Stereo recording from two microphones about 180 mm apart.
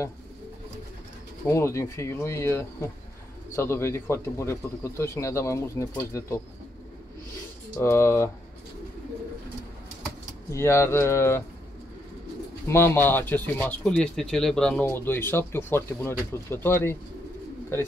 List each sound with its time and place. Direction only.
1.5 s speech: 15° left (ahead or behind)
7.8 s speech: 15° left (ahead or behind)
10.5 s speech: 15° left (ahead or behind)
12.6 s speech: 15° left (ahead or behind)